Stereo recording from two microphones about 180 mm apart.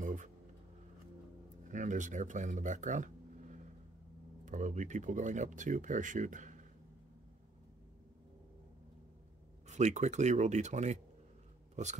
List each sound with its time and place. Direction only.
0.0 s music: 45° right (ahead or behind)
1.7 s speech: 45° right (ahead or behind)
9.7 s speech: 40° right (ahead or behind)